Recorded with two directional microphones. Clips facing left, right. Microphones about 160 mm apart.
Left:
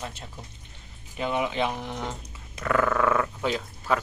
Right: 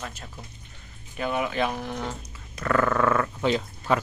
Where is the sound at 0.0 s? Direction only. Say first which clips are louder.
Even; 20° left (ahead or behind).